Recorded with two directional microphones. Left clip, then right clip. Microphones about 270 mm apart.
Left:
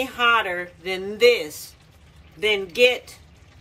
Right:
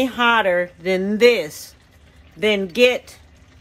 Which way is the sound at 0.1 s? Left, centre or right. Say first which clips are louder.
Right 1 dB; right.